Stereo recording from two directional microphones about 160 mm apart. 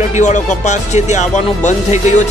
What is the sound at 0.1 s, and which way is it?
Speech, 45° left (ahead or behind).